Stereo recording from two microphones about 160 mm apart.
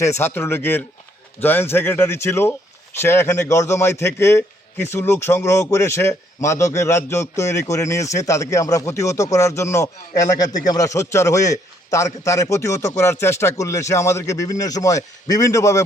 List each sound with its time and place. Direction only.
0.0 s a man's voice: 15° left (ahead or behind)